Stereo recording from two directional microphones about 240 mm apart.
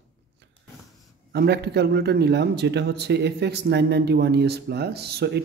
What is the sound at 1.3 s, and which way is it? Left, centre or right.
A man's voice, right.